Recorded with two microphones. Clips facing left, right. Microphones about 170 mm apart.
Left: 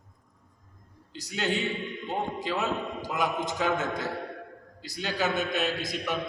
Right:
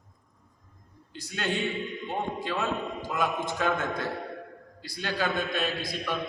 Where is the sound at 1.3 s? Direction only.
20° left (ahead or behind).